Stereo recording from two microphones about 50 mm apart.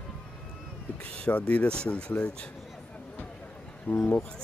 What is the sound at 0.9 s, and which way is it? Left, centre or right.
Speech, centre.